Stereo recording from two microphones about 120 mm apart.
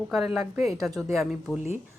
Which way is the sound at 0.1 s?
5° right (ahead or behind).